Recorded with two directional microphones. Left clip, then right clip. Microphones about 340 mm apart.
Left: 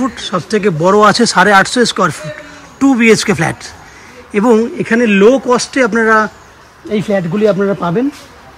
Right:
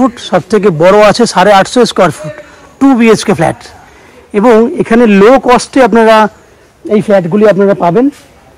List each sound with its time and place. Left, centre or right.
0.0 s speech: centre